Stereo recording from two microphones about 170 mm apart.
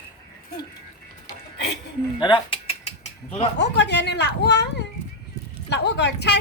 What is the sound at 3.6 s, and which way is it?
Speech, 85° left.